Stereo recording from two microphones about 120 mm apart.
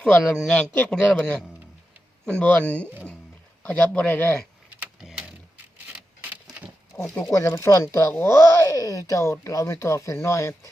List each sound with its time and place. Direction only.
0.0 s speech: 5° left (ahead or behind)
4.9 s a sound: 5° right (ahead or behind)
6.9 s speech: 20° left (ahead or behind)